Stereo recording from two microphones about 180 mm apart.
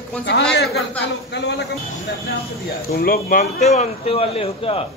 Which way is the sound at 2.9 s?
55° left (ahead or behind).